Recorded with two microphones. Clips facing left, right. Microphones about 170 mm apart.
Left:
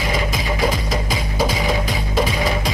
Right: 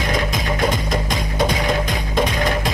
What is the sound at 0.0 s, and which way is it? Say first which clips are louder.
Music: right 1 dB; centre (ahead or behind).